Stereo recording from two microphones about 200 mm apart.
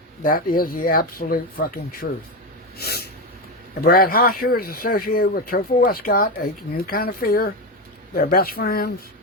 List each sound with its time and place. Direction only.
0.2 s speech: 45° left (ahead or behind)
2.7 s a sound: 50° left (ahead or behind)
3.8 s speech: 45° left (ahead or behind)